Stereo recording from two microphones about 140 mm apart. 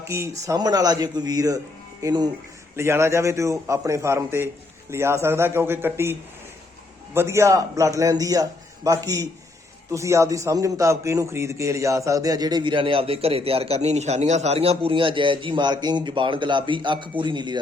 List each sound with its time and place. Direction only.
0.0 s a man's voice: 20° right (ahead or behind)